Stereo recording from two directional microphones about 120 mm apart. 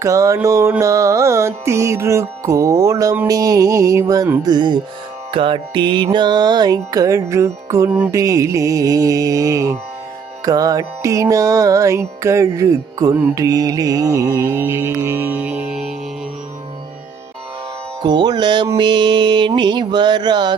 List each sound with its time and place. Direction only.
0.0 s mantra: 25° right (ahead or behind)
4.4 s music: 40° right (ahead or behind)
8.1 s mantra: 25° right (ahead or behind); by 16.0 s 5° right (ahead or behind)
18.0 s music: 40° right (ahead or behind)